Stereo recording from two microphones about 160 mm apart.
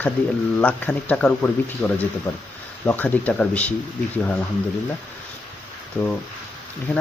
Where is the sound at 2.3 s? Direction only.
15° left (ahead or behind).